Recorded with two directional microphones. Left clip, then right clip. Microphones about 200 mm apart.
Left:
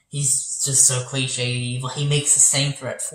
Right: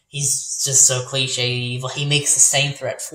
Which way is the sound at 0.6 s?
50° right (ahead or behind).